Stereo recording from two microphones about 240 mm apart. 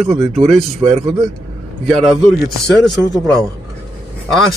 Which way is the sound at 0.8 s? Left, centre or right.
Right.